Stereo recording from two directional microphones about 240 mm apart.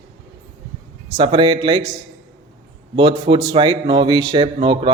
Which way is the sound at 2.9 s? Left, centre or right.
Right.